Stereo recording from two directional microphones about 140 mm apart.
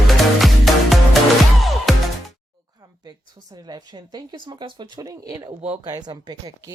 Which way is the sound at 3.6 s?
30° right (ahead or behind).